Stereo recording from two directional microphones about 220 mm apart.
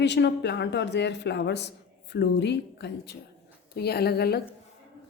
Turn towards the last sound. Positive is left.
turn(degrees=45)  # may be behind; listen again after turning